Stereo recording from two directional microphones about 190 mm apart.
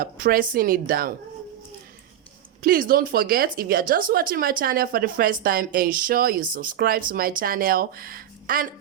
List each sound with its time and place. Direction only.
0.0 s a woman's voice: 50° right (ahead or behind)
2.6 s a woman's voice: 50° right (ahead or behind)